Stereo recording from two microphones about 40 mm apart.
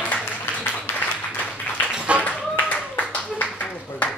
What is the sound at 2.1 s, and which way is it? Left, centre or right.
Clapping, right.